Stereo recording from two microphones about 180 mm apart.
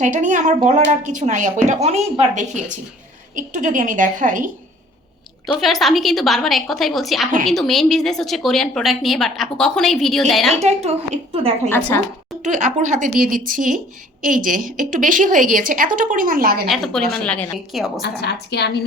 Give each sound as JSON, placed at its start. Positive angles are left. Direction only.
{"t": 0.0, "sound": "a woman's voice", "side_deg": -45}
{"t": 5.5, "sound": "a woman's voice", "side_deg": 0}
{"t": 10.6, "sound": "a woman's voice", "side_deg": -35}
{"t": 11.7, "sound": "a woman's voice", "side_deg": 15}
{"t": 12.4, "sound": "a woman's voice", "side_deg": -45}
{"t": 16.6, "sound": "a woman's voice", "side_deg": 0}
{"t": 17.2, "sound": "a woman's voice", "side_deg": 10}
{"t": 17.7, "sound": "a woman's voice", "side_deg": 0}
{"t": 18.0, "sound": "a woman's voice", "side_deg": 65}